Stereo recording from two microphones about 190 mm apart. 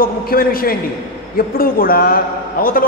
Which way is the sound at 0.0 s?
50° left (ahead or behind).